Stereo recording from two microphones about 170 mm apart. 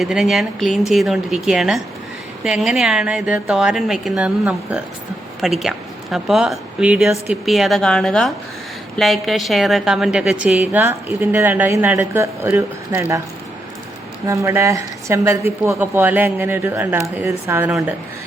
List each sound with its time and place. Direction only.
0.0 s a woman's voice: centre (ahead or behind)
14.3 s a woman's voice: 15° right (ahead or behind)